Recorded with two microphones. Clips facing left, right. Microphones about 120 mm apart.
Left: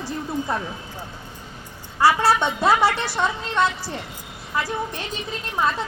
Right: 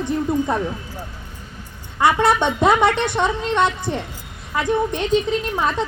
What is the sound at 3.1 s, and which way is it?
A woman's voice, 25° right (ahead or behind).